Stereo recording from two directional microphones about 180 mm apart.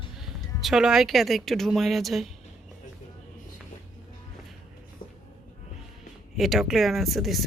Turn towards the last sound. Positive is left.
turn(degrees=0)  # may be behind; listen again after turning